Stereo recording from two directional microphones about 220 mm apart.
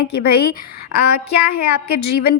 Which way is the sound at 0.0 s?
45° left (ahead or behind).